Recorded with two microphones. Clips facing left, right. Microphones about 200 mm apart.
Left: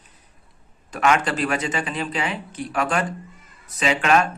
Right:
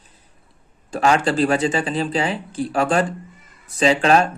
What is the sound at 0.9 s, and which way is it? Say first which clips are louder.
Speech: right 3 dB; 30° right (ahead or behind).